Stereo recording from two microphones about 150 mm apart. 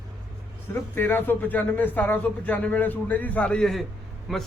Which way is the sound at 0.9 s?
15° left (ahead or behind).